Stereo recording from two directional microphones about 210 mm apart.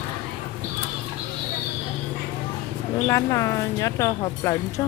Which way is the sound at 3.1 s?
15° left (ahead or behind).